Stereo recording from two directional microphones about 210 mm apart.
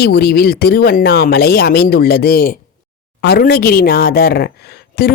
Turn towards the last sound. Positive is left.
turn(degrees=50)  # may be behind; listen again after turning